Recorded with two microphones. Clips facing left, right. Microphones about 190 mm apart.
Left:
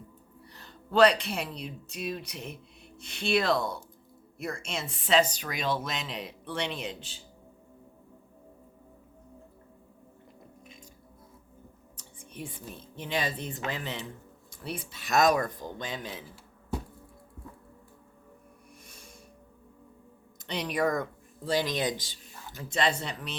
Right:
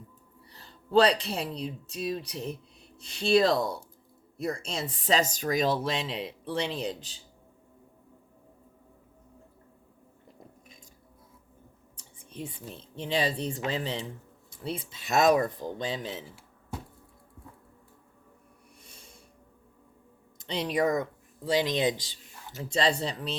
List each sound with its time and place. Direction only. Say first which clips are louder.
0.4 s speech: right 1 dB; 30° right (ahead or behind)
11.9 s speech: right 2 dB; 25° right (ahead or behind)
18.9 s snort: even; 25° right (ahead or behind)
20.5 s speech: right 2 dB; 30° right (ahead or behind)